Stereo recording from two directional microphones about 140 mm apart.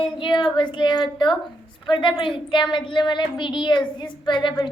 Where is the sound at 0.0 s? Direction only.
35° left (ahead or behind).